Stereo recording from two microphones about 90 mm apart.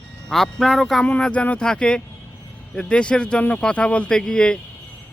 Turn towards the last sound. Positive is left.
turn(degrees=10)  # may be behind; listen again after turning